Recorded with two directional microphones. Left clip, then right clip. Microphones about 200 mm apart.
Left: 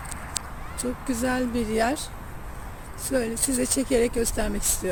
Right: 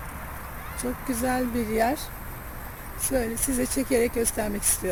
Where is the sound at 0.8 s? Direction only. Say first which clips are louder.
Left 1 dB; centre (ahead or behind).